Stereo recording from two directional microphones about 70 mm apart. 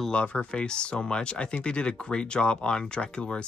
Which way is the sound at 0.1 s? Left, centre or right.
Centre.